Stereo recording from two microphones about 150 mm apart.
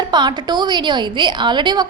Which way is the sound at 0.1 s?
30° right (ahead or behind).